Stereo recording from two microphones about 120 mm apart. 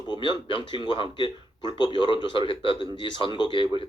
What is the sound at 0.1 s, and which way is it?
A man's voice, 40° left (ahead or behind).